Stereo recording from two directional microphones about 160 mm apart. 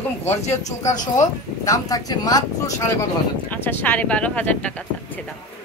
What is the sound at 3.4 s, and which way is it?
A woman's voice, 10° left (ahead or behind).